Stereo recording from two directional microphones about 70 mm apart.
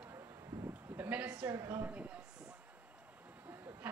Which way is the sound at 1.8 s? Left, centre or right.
Right.